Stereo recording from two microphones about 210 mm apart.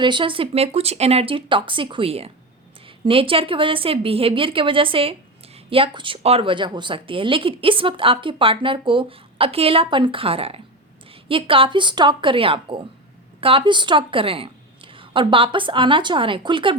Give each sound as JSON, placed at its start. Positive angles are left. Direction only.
{"t": 0.0, "sound": "a woman's voice", "side_deg": -20}